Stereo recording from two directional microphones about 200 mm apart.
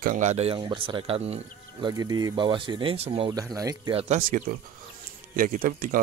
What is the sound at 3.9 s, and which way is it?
Speech, 35° right (ahead or behind).